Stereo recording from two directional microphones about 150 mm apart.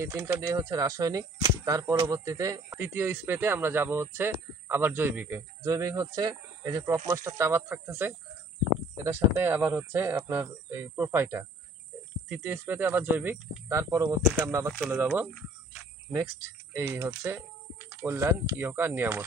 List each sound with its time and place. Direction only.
0.0 s speech: 20° right (ahead or behind)
15.7 s cricket: 15° right (ahead or behind)
18.6 s speech: 15° right (ahead or behind)